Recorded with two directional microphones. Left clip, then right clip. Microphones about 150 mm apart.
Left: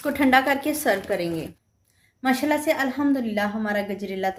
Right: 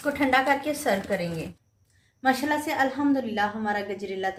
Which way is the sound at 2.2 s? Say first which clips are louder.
Left 3 dB; 35° left (ahead or behind).